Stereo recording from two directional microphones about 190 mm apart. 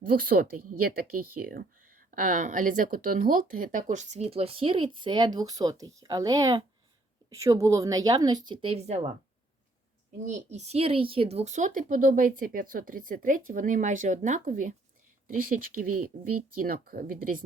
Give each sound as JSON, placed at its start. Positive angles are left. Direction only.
{"t": 0.1, "sound": "a woman's voice", "side_deg": -50}
{"t": 10.2, "sound": "speech", "side_deg": -40}
{"t": 16.1, "sound": "speech", "side_deg": -45}